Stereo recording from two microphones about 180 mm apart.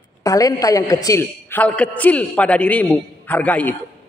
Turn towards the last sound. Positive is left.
turn(degrees=10)  # may be behind; listen again after turning